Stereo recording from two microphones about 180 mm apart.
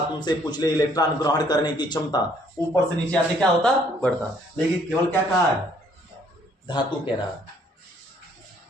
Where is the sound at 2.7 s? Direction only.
5° left (ahead or behind).